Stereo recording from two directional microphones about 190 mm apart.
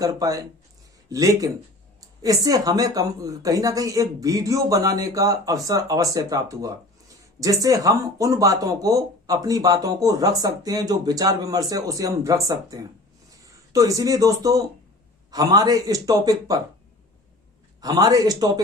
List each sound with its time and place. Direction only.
0.0 s speech: 20° right (ahead or behind)
17.7 s speech: 20° right (ahead or behind)